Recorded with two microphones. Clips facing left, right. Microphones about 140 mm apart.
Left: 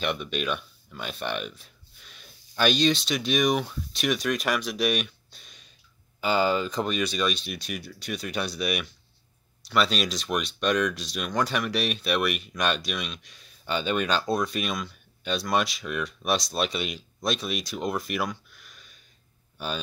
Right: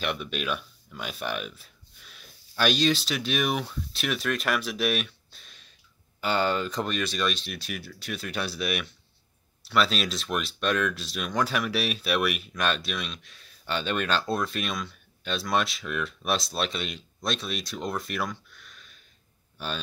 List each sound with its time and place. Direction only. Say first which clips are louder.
0.0 s speech: left 2 dB; centre (ahead or behind)